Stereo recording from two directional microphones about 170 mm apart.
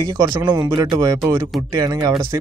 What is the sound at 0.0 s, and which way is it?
Speech, 20° right (ahead or behind).